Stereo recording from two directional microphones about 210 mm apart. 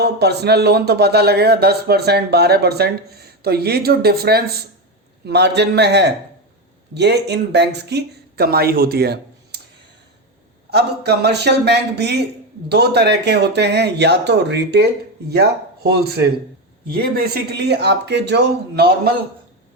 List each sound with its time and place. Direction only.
0.0 s speech: 50° right (ahead or behind)
10.7 s speech: 50° right (ahead or behind)